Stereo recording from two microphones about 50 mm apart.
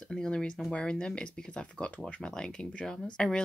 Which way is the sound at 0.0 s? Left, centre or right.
Centre.